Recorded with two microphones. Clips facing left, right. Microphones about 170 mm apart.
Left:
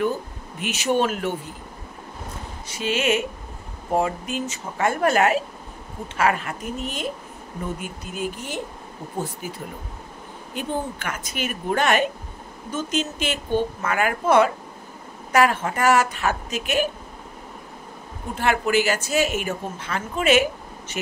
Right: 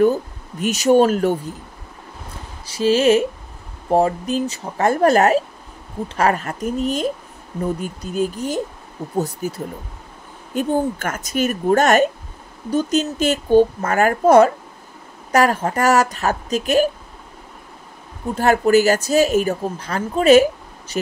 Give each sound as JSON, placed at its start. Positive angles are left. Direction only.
{"t": 0.6, "sound": "speech", "side_deg": -40}
{"t": 2.6, "sound": "speech", "side_deg": -35}
{"t": 18.3, "sound": "speech", "side_deg": -40}